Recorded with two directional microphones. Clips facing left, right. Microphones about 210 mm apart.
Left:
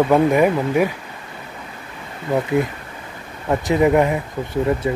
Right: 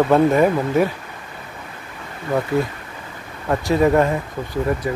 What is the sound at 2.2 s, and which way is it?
Speech, 15° left (ahead or behind).